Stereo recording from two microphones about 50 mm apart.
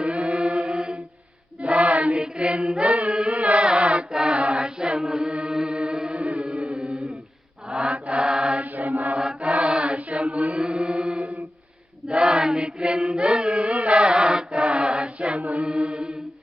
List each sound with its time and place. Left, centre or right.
0.0 s chant: right
1.6 s choir: right
2.2 s chant: centre
7.7 s mantra: right
8.6 s mantra: right
9.1 s chant: centre